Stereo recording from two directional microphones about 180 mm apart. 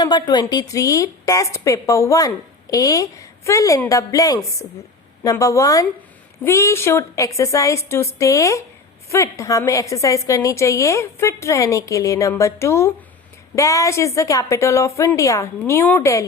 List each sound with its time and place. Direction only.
0.0 s a woman's voice: 25° left (ahead or behind)